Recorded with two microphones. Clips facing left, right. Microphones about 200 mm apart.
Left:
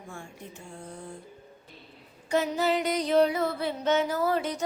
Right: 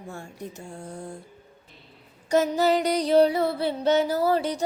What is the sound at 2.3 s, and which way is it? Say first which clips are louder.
Child singing: right 5 dB; 40° right (ahead or behind).